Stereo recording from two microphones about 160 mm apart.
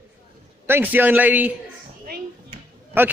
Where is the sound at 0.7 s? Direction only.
10° right (ahead or behind).